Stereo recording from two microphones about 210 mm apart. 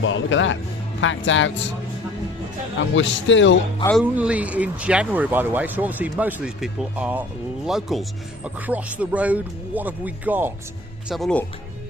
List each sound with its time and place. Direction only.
0.0 s a man's voice: 65° left (ahead or behind)
2.7 s a man's voice: 60° left (ahead or behind)
3.9 s speech: 5° right (ahead or behind)
11.1 s speech: 5° left (ahead or behind)